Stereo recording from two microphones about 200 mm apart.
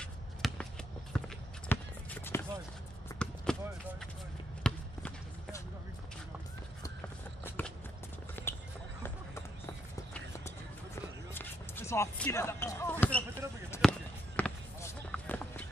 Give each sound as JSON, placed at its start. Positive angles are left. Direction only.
{"t": 0.0, "sound": "basketball bounce", "side_deg": 5}
{"t": 1.1, "sound": "clip-clop", "side_deg": 5}
{"t": 3.1, "sound": "basketball bounce", "side_deg": 15}
{"t": 3.5, "sound": "a sound", "side_deg": 5}
{"t": 4.6, "sound": "basketball bounce", "side_deg": 5}
{"t": 7.4, "sound": "walk", "side_deg": 10}
{"t": 8.4, "sound": "a sound", "side_deg": 10}
{"t": 11.3, "sound": "basketball bounce", "side_deg": 10}
{"t": 13.7, "sound": "fireworks", "side_deg": 5}